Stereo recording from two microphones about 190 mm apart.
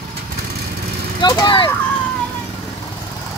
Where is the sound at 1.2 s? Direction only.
20° left (ahead or behind).